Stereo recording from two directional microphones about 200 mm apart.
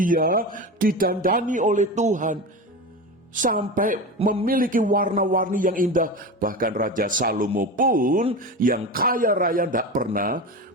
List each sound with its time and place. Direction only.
0.0 s a man's voice: 45° right (ahead or behind)